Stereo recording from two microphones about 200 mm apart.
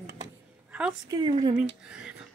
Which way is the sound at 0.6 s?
5° right (ahead or behind).